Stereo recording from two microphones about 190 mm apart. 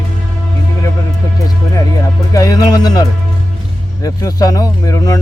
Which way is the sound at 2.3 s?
20° left (ahead or behind).